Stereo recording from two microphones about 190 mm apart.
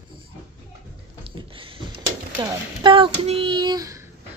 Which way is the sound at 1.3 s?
25° right (ahead or behind).